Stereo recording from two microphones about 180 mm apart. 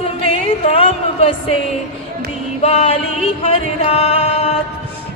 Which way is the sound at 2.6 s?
35° left (ahead or behind).